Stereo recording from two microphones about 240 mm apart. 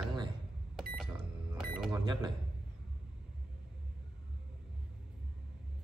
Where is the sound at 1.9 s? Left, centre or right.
Centre.